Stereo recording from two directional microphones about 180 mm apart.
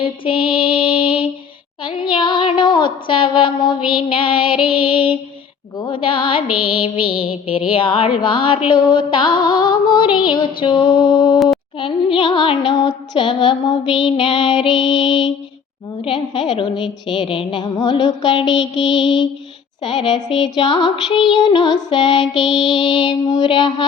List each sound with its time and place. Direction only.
0.0 s female singing: 30° left (ahead or behind)
1.8 s a sound: 25° left (ahead or behind)
4.1 s music: 30° left (ahead or behind)
7.3 s music: 5° right (ahead or behind)
7.7 s music: 30° left (ahead or behind)
18.4 s music: centre (ahead or behind)
19.8 s music: 25° left (ahead or behind)